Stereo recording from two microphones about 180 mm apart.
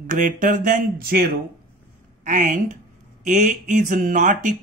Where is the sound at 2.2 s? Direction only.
45° right (ahead or behind).